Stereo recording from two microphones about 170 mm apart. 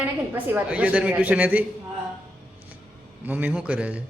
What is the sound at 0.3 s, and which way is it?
A woman's voice, 10° right (ahead or behind).